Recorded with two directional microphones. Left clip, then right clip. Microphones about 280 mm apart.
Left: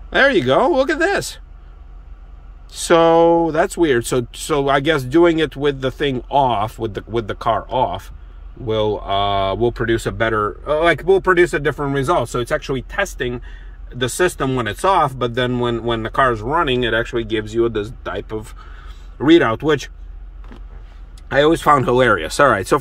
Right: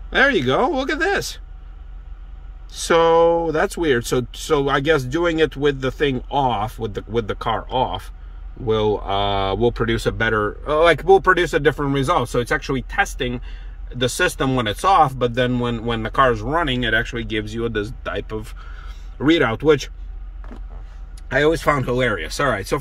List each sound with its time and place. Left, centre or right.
0.1 s speech: centre
2.7 s speech: centre
17.7 s speech: centre
21.4 s speech: centre